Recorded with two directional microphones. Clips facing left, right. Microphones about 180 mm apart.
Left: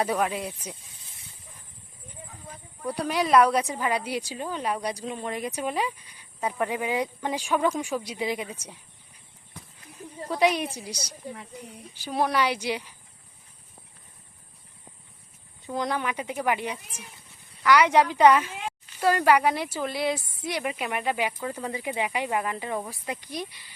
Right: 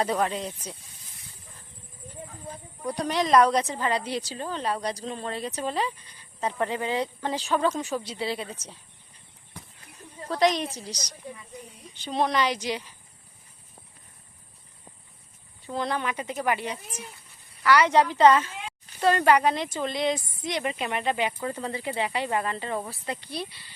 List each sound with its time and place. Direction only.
0.0 s a woman's voice: 10° left (ahead or behind)
2.9 s a woman's voice: 5° left (ahead or behind)
10.2 s a woman's voice: 10° left (ahead or behind)
11.3 s speech: 75° left (ahead or behind)
11.9 s a woman's voice: 10° left (ahead or behind)
15.6 s a woman's voice: 15° left (ahead or behind)